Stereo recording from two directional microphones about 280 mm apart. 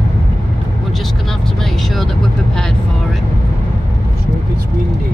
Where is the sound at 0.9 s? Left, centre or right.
Centre.